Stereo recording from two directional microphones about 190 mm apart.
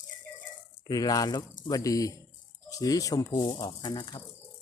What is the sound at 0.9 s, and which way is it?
Speech, 20° left (ahead or behind).